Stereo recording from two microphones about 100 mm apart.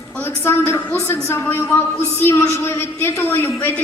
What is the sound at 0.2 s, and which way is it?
A woman's voice, 25° left (ahead or behind).